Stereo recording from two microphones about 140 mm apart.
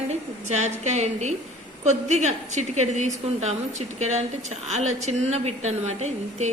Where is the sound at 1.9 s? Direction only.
55° right (ahead or behind).